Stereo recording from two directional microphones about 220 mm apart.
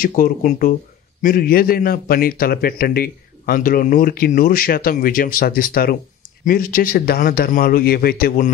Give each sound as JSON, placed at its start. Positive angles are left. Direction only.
{"t": 0.0, "sound": "a man's voice", "side_deg": 40}